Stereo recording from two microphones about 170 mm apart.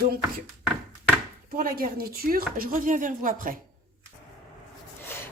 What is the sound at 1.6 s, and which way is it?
Speech, 55° right (ahead or behind).